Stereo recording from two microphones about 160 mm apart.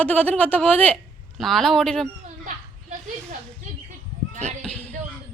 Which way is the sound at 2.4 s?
50° right (ahead or behind).